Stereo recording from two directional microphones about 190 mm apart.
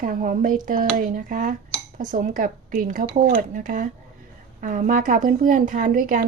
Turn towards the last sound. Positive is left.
turn(degrees=-45)  # may be behind; listen again after turning